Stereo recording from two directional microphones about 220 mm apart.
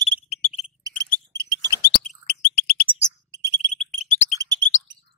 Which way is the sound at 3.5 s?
20° right (ahead or behind).